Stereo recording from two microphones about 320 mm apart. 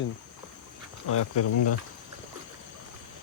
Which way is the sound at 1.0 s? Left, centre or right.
Left.